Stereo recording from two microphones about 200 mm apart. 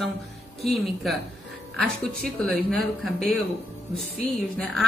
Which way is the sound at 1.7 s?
Centre (ahead or behind).